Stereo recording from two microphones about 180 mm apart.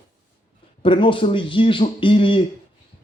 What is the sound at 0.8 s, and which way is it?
Speech, 30° left (ahead or behind).